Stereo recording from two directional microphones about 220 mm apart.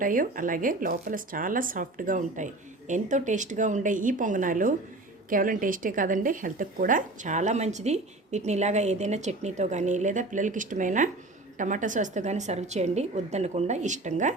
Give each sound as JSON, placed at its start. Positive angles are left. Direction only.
{"t": 0.0, "sound": "speech", "side_deg": -40}